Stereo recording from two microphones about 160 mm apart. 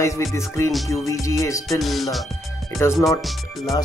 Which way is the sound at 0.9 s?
20° left (ahead or behind).